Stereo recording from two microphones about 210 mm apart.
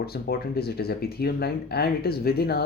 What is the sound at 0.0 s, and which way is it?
Speech, 50° left (ahead or behind).